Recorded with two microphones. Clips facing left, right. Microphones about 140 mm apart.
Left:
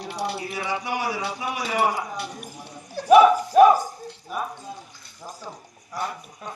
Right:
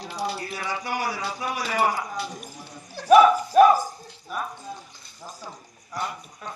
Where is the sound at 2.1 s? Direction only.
65° left (ahead or behind).